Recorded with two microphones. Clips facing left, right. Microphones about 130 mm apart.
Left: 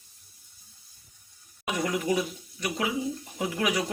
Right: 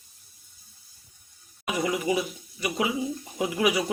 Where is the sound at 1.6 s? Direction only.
5° right (ahead or behind).